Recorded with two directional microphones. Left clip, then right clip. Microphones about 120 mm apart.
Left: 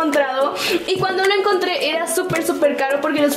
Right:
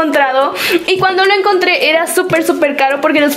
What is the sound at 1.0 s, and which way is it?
A woman's voice, 20° right (ahead or behind).